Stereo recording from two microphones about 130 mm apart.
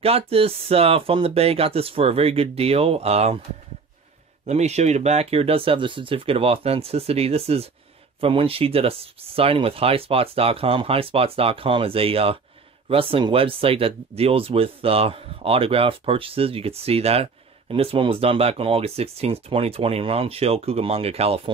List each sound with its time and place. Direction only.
0.0 s speech: 50° right (ahead or behind)
4.5 s speech: 60° right (ahead or behind)